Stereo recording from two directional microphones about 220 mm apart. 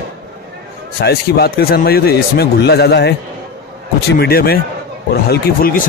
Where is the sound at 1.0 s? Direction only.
45° left (ahead or behind).